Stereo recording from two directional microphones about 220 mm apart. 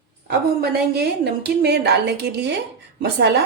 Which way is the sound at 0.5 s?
45° right (ahead or behind).